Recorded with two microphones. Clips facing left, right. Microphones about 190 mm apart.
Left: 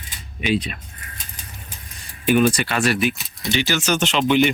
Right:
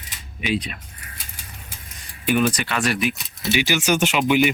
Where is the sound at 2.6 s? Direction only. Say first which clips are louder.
Left 3 dB; 35° left (ahead or behind).